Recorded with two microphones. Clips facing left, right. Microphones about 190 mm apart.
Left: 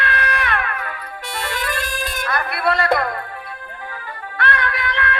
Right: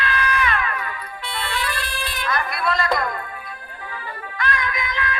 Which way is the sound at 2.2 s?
60° left (ahead or behind).